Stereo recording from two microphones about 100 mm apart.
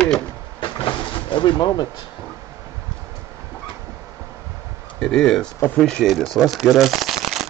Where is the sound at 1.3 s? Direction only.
50° left (ahead or behind).